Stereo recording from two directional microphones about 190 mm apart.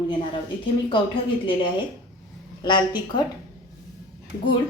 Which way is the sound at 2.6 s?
25° left (ahead or behind).